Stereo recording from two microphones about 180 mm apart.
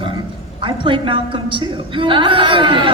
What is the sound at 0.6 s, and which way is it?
A man's voice, 30° right (ahead or behind).